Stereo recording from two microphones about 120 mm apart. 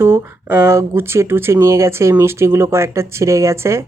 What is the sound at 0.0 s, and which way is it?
Speech, 20° right (ahead or behind).